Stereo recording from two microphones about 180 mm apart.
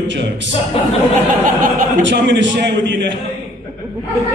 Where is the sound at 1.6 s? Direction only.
45° right (ahead or behind).